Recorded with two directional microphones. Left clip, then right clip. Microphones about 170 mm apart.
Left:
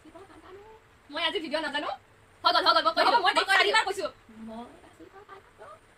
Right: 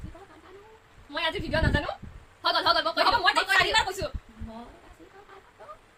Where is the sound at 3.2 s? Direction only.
10° right (ahead or behind).